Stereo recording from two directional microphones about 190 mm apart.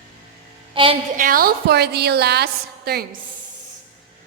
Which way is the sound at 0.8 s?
25° right (ahead or behind).